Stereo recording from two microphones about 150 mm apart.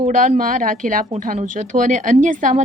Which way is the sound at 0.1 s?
60° right (ahead or behind).